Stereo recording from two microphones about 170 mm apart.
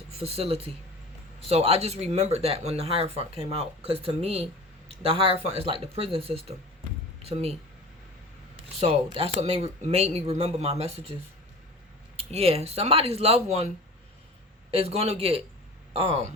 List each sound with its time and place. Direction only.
0.2 s speech: 35° right (ahead or behind)
8.8 s speech: 35° right (ahead or behind)
12.1 s speech: 35° right (ahead or behind)
14.7 s speech: 35° right (ahead or behind)